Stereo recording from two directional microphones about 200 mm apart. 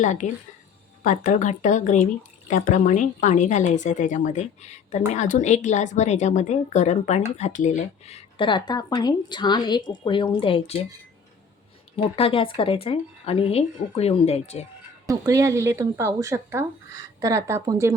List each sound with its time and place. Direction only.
0.0 s a woman's voice: 40° left (ahead or behind)
11.9 s speech: 30° left (ahead or behind)
15.0 s speech: 15° right (ahead or behind)